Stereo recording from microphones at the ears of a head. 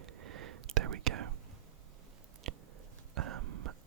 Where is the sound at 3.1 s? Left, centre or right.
Right.